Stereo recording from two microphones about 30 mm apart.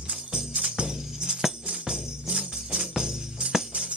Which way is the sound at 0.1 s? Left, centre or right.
Right.